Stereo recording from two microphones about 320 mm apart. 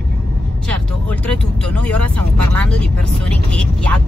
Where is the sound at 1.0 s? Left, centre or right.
Centre.